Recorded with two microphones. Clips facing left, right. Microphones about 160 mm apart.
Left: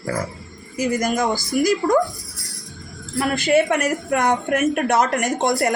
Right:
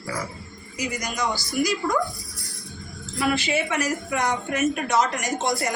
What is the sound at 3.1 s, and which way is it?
A woman's voice, 55° left (ahead or behind).